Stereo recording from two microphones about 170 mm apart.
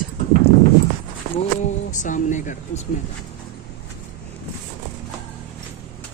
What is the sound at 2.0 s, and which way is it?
Speech, 50° left (ahead or behind).